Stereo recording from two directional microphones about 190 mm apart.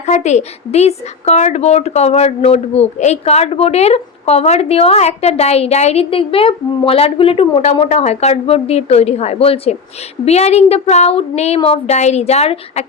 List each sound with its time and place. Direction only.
0.0 s speech: 35° left (ahead or behind)